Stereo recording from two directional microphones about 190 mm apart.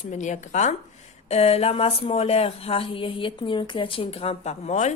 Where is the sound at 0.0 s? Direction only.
40° left (ahead or behind).